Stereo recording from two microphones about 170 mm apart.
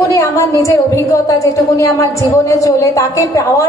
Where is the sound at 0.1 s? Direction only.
20° left (ahead or behind).